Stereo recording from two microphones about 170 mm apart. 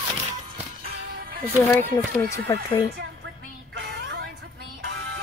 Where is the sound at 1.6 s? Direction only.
15° left (ahead or behind).